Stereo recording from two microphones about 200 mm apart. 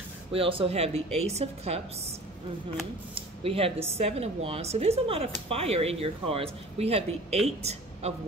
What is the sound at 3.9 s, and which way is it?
Speech, 30° right (ahead or behind).